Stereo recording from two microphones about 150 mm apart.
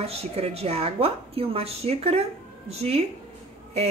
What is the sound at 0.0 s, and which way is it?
A woman's voice, 45° right (ahead or behind).